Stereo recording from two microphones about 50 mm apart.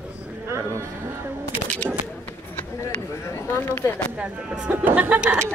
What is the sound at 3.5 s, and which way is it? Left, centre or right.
Speech, left.